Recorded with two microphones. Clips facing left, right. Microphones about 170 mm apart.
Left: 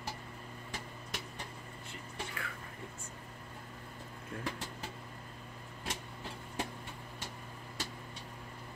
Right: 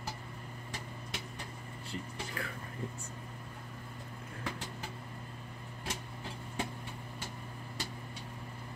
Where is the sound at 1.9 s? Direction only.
35° right (ahead or behind).